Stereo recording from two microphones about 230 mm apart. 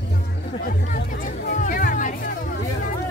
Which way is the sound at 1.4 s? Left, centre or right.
Left.